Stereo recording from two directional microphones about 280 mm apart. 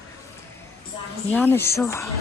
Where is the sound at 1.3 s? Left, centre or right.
Centre.